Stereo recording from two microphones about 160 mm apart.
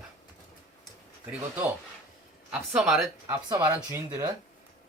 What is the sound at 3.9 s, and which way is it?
Speech, 20° right (ahead or behind).